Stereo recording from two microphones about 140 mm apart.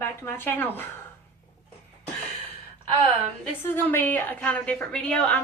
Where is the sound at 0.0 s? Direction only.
15° left (ahead or behind).